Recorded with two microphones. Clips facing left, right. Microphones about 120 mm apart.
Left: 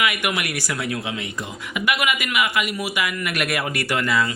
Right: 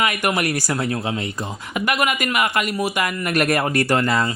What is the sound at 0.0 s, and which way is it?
A man's voice, 40° right (ahead or behind).